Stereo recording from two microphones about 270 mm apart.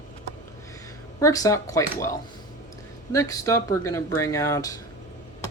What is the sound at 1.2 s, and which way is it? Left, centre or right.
Speech, centre.